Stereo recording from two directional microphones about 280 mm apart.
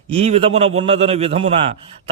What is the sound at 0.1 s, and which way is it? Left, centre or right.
A man's voice, right.